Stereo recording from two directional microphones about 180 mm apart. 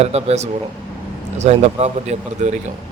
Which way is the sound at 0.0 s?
35° right (ahead or behind).